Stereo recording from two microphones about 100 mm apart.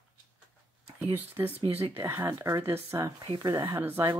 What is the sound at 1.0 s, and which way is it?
Speech, 20° right (ahead or behind).